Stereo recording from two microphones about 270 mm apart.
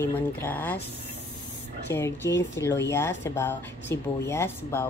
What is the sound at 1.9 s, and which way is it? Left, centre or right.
Speech, centre.